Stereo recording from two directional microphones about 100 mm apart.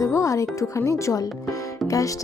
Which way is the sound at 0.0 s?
30° left (ahead or behind).